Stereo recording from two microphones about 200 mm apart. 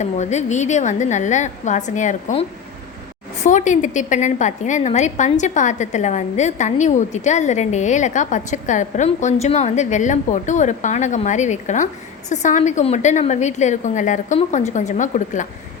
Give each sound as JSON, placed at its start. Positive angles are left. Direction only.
{"t": 0.0, "sound": "a woman's voice", "side_deg": 35}